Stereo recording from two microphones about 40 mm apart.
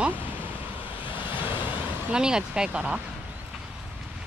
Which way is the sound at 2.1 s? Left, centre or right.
Centre.